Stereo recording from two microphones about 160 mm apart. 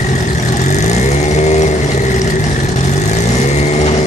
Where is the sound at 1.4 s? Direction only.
45° left (ahead or behind).